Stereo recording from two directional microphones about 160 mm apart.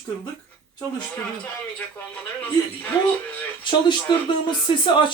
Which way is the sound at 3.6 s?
30° left (ahead or behind).